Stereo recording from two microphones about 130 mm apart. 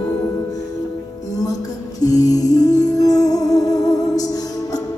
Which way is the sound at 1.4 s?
25° left (ahead or behind).